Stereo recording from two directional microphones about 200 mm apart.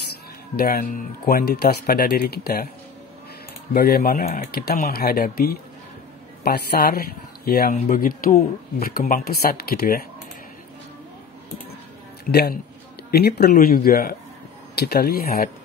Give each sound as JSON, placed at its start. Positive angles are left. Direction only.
{"t": 0.6, "sound": "speech", "side_deg": 45}
{"t": 3.7, "sound": "speech", "side_deg": 50}
{"t": 12.3, "sound": "speech", "side_deg": 50}